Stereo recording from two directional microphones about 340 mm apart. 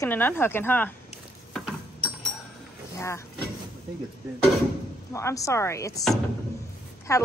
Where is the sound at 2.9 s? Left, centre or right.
Centre.